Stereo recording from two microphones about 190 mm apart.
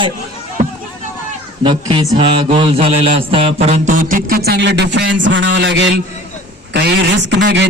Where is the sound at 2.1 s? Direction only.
30° right (ahead or behind); by 4.4 s 45° right (ahead or behind).